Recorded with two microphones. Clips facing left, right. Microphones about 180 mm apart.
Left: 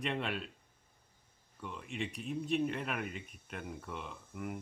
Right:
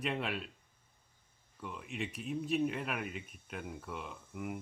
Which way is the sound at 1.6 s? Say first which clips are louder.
Even; centre (ahead or behind).